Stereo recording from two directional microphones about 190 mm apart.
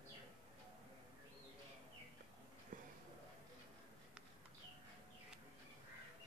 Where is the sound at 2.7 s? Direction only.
45° right (ahead or behind).